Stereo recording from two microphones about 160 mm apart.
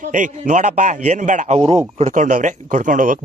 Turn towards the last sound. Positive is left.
turn(degrees=-55)  # may be behind; listen again after turning